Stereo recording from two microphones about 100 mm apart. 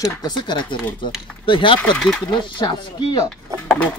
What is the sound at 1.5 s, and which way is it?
Speech, 60° left (ahead or behind).